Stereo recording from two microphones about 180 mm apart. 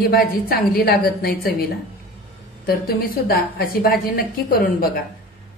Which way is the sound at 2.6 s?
55° left (ahead or behind).